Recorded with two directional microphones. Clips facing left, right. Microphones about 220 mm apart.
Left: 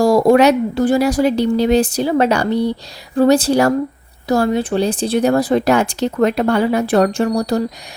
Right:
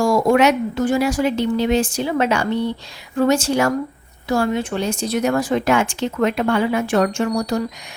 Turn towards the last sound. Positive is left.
turn(degrees=35)  # may be behind; listen again after turning